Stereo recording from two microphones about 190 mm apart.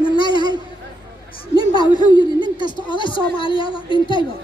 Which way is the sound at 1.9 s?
20° left (ahead or behind).